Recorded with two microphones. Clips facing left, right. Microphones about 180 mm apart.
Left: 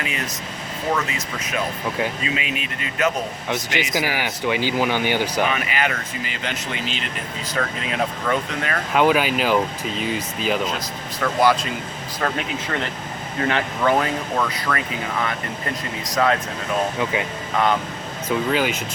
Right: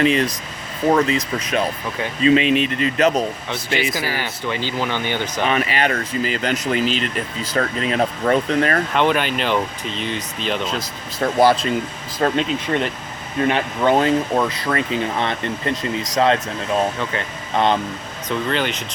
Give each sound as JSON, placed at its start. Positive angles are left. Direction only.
{"t": 0.0, "sound": "speech", "side_deg": -30}
{"t": 3.5, "sound": "speech", "side_deg": 15}
{"t": 5.5, "sound": "speech", "side_deg": -30}
{"t": 8.9, "sound": "speech", "side_deg": 5}
{"t": 11.2, "sound": "speech", "side_deg": -35}
{"t": 12.2, "sound": "speech", "side_deg": -25}
{"t": 17.0, "sound": "speech", "side_deg": 10}
{"t": 17.6, "sound": "speech", "side_deg": -25}
{"t": 18.3, "sound": "speech", "side_deg": 5}